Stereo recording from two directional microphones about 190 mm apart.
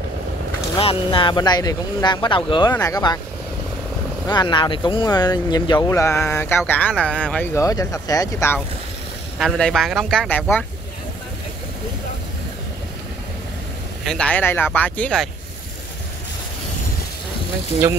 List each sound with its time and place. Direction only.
0.7 s speech: 30° left (ahead or behind)
4.3 s speech: 25° left (ahead or behind)
9.4 s speech: centre (ahead or behind)
14.0 s speech: 5° left (ahead or behind)